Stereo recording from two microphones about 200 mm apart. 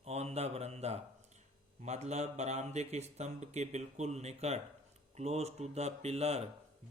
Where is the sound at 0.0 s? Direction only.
30° right (ahead or behind).